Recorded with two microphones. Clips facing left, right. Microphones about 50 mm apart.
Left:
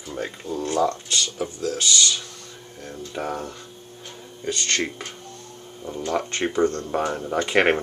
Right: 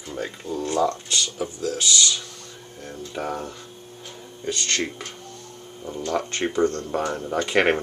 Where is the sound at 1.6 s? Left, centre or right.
Centre.